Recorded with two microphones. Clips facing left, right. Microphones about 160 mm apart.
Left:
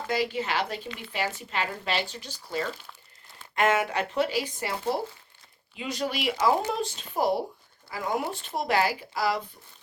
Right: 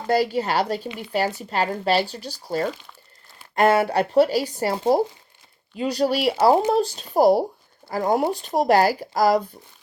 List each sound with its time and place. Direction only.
0.1 s speech: 40° right (ahead or behind)